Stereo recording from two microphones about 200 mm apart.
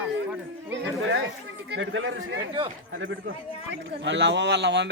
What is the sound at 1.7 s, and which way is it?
Speech, 65° right (ahead or behind).